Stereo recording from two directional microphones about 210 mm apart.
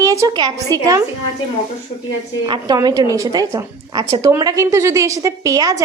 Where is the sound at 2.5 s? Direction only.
20° right (ahead or behind).